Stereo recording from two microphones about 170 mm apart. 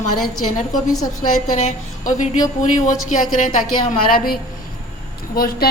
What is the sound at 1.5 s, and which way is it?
A woman's voice, 45° left (ahead or behind).